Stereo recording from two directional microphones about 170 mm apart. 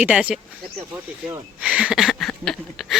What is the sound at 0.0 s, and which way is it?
Speech, 5° right (ahead or behind).